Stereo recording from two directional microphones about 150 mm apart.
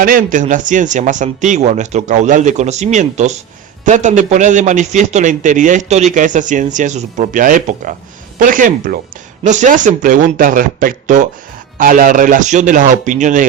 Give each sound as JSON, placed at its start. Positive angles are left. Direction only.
{"t": 0.0, "sound": "a man's voice", "side_deg": -65}
{"t": 9.4, "sound": "a man's voice", "side_deg": -55}